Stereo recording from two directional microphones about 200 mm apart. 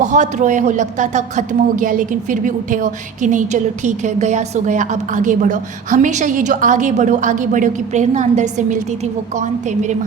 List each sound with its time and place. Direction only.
0.0 s speech: 35° right (ahead or behind)